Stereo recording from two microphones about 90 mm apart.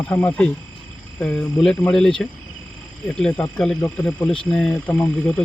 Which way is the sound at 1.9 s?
5° left (ahead or behind).